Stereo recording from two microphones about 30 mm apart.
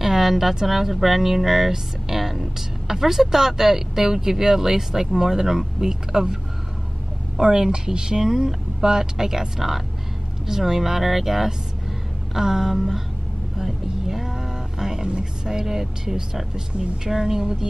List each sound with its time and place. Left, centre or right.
0.0 s speech: centre
7.3 s speech: right
13.6 s a sound: centre
15.6 s speech: centre